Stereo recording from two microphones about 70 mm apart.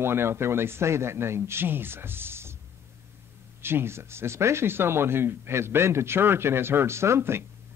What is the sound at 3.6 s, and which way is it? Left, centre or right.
Speech, right.